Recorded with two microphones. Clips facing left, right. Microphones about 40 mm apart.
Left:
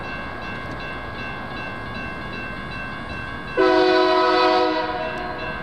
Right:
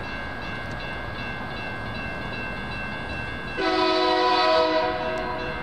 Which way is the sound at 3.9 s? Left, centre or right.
Centre.